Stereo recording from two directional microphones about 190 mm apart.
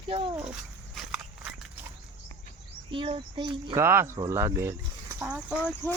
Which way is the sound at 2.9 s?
25° right (ahead or behind).